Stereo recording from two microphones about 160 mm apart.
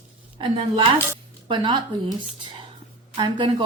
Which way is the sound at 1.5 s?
30° right (ahead or behind).